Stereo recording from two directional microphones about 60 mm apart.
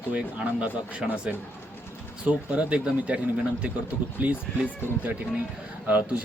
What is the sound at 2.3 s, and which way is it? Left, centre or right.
Speech, centre.